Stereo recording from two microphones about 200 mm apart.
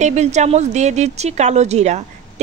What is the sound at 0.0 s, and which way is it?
A woman's voice, 35° right (ahead or behind).